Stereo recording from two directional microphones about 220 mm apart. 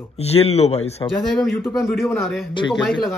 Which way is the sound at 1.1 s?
Centre (ahead or behind).